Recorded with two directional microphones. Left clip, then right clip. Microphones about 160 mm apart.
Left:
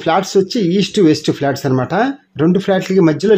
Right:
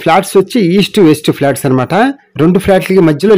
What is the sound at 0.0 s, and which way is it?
Speech, 40° right (ahead or behind).